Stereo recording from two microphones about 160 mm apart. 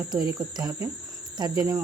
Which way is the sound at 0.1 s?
25° right (ahead or behind).